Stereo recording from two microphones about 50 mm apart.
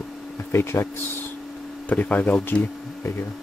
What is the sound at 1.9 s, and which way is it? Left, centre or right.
Speech, left.